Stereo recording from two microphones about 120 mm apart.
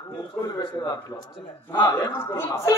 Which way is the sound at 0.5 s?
30° left (ahead or behind).